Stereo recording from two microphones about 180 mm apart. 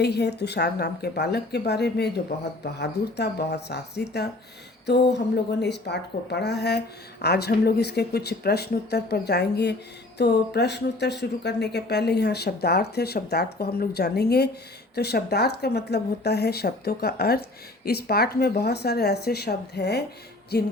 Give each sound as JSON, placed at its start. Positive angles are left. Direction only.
{"t": 0.0, "sound": "a woman's voice", "side_deg": 65}